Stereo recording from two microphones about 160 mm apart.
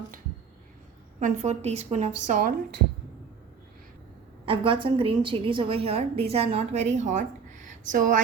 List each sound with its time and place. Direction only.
1.2 s a woman's voice: 45° right (ahead or behind)
4.4 s a woman's voice: 35° right (ahead or behind); by 8.2 s 55° right (ahead or behind)